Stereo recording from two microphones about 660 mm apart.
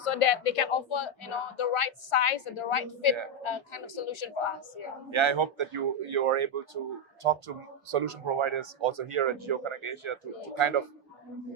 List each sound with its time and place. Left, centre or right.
0.0 s speech: left
5.1 s speech: right